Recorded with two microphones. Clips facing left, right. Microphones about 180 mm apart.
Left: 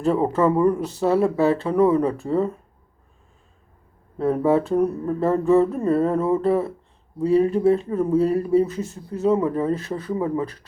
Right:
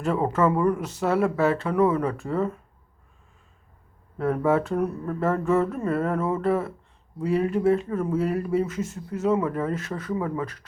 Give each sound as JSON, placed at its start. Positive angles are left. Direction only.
{"t": 0.0, "sound": "speech", "side_deg": 30}
{"t": 4.2, "sound": "speech", "side_deg": 30}